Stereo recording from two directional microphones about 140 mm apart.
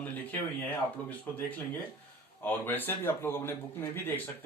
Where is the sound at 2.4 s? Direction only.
15° left (ahead or behind).